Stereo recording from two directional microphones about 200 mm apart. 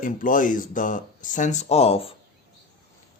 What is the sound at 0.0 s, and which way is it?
Speech, 40° left (ahead or behind).